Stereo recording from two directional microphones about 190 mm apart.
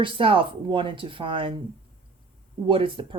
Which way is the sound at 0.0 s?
25° right (ahead or behind).